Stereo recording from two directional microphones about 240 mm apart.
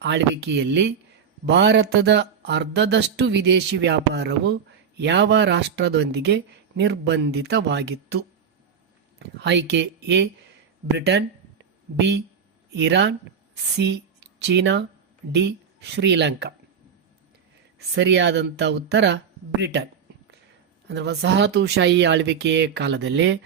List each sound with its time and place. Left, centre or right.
0.0 s speech: right
10.9 s a sound: right
12.7 s speech: right
17.7 s speech: right
20.8 s speech: right